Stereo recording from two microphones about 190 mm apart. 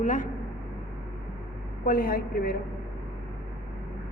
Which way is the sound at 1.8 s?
50° left (ahead or behind).